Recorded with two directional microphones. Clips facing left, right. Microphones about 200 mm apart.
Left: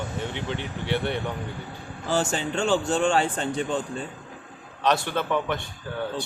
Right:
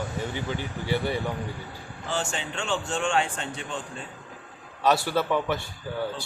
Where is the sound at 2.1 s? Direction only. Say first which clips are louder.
Left 6 dB; 40° left (ahead or behind).